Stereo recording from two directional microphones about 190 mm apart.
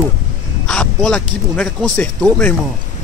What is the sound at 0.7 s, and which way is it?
Speech, 5° left (ahead or behind).